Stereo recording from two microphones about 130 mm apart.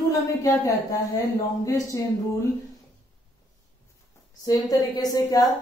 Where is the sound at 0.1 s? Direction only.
25° left (ahead or behind).